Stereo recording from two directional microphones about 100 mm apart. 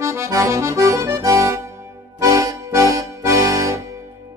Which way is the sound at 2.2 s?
35° right (ahead or behind).